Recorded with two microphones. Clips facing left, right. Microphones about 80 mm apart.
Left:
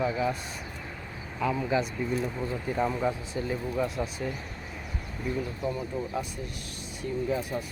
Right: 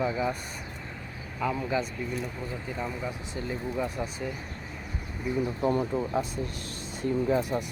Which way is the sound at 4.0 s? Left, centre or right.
Centre.